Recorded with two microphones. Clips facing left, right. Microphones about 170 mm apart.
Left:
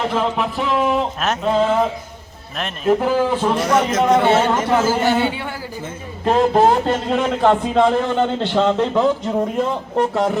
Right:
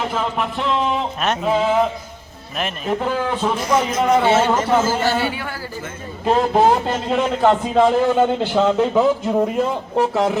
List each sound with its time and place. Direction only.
0.1 s speech: centre (ahead or behind)
3.5 s a man's voice: 75° left (ahead or behind)
4.0 s speech: 5° right (ahead or behind)
5.0 s a man's voice: 20° left (ahead or behind)
6.2 s speech: centre (ahead or behind)